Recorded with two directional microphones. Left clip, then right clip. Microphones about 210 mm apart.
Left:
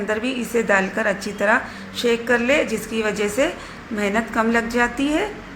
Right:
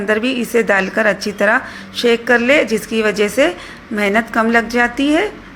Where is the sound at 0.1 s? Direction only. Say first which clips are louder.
Right 8 dB; 25° right (ahead or behind).